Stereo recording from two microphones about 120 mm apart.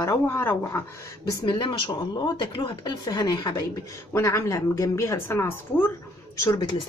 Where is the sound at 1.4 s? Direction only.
40° left (ahead or behind); by 5.9 s 20° left (ahead or behind).